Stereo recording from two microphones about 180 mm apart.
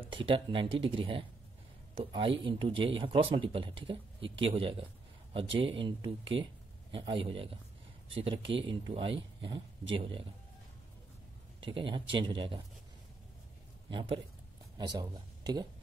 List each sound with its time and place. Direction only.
0.0 s speech: 30° right (ahead or behind)
11.6 s speech: 25° right (ahead or behind)
13.8 s speech: 30° right (ahead or behind)